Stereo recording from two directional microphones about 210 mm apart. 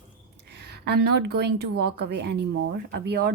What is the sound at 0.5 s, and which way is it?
A woman's voice, 50° right (ahead or behind).